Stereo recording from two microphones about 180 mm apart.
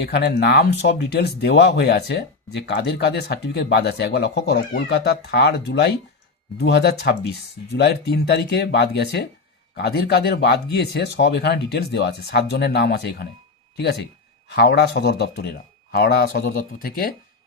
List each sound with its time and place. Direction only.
0.0 s speech: 65° left (ahead or behind)